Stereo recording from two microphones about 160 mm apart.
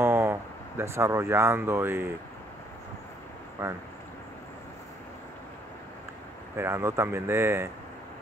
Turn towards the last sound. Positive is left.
turn(degrees=-15)  # may be behind; listen again after turning